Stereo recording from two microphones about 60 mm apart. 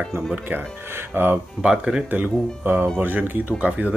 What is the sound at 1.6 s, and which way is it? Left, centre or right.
Speech, centre.